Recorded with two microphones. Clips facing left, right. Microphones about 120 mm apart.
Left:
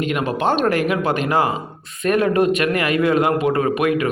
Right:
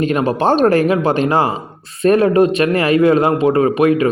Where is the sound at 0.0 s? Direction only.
35° right (ahead or behind).